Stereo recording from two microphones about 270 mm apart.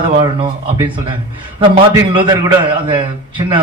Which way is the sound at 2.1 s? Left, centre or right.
Centre.